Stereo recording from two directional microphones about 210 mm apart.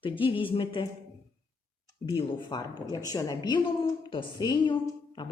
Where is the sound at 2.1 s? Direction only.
20° left (ahead or behind).